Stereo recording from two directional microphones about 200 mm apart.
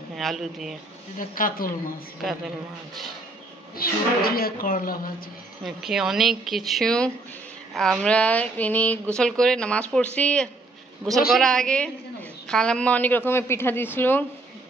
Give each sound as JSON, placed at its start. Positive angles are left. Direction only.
{"t": 0.1, "sound": "speech", "side_deg": 0}
{"t": 1.1, "sound": "a woman's voice", "side_deg": 45}
{"t": 3.7, "sound": "a woman's voice", "side_deg": 50}
{"t": 5.6, "sound": "a woman's voice", "side_deg": 0}